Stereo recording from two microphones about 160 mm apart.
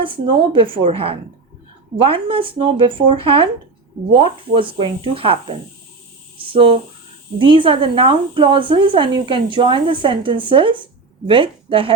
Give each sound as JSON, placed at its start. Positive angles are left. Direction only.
{"t": 0.0, "sound": "speech", "side_deg": -30}
{"t": 4.5, "sound": "speech", "side_deg": -35}